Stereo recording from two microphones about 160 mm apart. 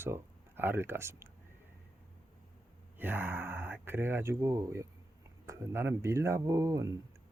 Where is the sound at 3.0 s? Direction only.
10° right (ahead or behind).